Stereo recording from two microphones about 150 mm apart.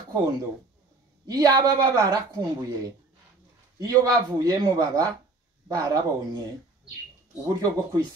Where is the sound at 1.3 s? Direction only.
25° right (ahead or behind).